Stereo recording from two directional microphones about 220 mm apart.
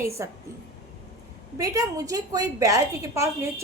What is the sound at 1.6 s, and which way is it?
A woman's voice, 15° right (ahead or behind).